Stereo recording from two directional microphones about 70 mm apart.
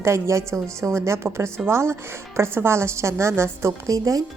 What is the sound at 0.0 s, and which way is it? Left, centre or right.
A woman's voice, right.